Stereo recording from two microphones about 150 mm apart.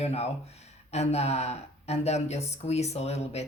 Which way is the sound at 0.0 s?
45° left (ahead or behind).